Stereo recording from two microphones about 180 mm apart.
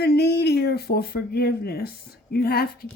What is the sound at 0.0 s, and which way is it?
Speech, 65° left (ahead or behind).